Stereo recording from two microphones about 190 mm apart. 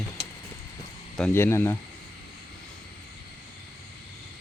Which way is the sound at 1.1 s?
10° left (ahead or behind).